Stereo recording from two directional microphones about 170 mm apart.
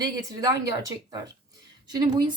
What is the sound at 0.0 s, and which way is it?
Speech, 20° right (ahead or behind).